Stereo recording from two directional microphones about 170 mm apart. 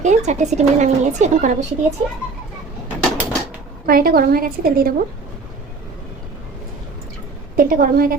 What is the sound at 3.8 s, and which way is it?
A woman's voice, 60° right (ahead or behind).